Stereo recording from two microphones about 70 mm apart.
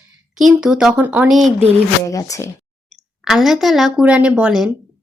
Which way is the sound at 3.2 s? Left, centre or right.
Centre.